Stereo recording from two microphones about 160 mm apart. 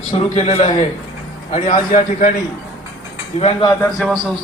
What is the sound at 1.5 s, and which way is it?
Speech, 55° left (ahead or behind).